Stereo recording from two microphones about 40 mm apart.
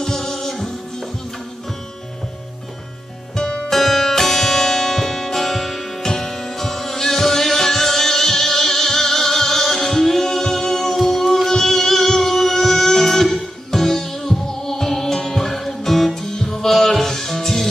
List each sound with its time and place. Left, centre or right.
0.0 s music: centre
3.3 s music: centre
3.7 s music: centre